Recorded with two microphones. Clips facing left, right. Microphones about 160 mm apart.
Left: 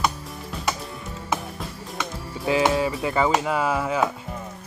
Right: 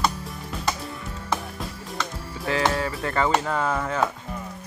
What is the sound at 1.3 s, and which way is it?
Music, 5° left (ahead or behind).